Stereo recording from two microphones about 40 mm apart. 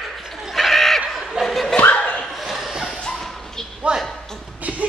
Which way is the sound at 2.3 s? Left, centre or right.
Centre.